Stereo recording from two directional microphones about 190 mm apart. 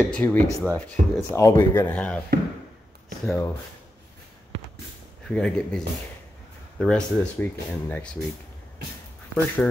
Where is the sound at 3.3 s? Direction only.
15° left (ahead or behind).